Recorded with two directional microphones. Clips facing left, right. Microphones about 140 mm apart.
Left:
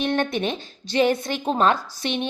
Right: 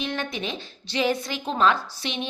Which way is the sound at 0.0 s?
55° left (ahead or behind).